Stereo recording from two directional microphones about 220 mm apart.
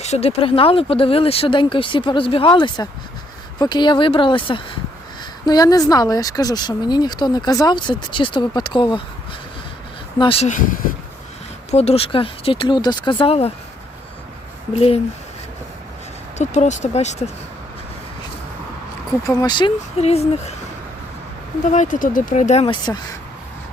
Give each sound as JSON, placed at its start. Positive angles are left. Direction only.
{"t": 0.0, "sound": "speech", "side_deg": 30}
{"t": 10.2, "sound": "speech", "side_deg": 25}
{"t": 11.7, "sound": "speech", "side_deg": 30}
{"t": 14.8, "sound": "speech", "side_deg": 25}
{"t": 16.4, "sound": "speech", "side_deg": 30}
{"t": 19.2, "sound": "speech", "side_deg": 15}
{"t": 21.6, "sound": "speech", "side_deg": 35}